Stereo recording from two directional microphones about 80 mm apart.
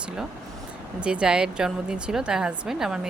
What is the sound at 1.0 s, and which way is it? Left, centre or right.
A woman's voice, centre.